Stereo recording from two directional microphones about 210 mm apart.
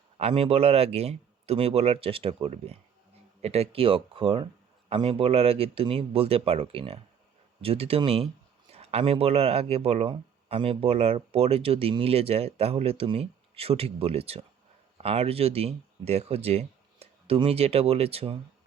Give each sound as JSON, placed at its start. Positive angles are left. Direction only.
{"t": 0.2, "sound": "speech", "side_deg": -30}